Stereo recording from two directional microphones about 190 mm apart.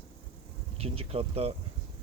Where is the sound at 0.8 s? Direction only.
30° right (ahead or behind).